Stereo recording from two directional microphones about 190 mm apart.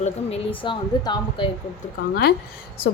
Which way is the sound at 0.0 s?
30° left (ahead or behind).